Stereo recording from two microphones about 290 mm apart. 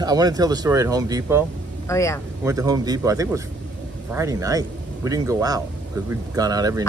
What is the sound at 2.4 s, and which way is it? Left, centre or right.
Speech, centre.